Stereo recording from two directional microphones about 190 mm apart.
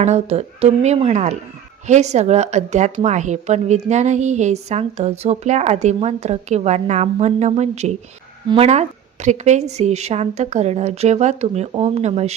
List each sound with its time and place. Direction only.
0.0 s speech: 35° right (ahead or behind)